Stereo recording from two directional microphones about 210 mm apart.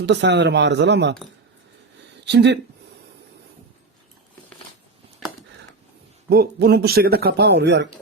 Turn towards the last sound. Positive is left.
turn(degrees=-55)  # may be behind; listen again after turning